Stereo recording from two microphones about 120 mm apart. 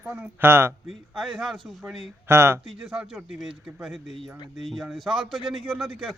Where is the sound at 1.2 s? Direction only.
Centre (ahead or behind).